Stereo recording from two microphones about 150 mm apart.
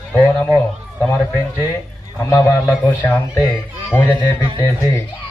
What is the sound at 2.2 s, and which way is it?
A man's voice, 20° left (ahead or behind).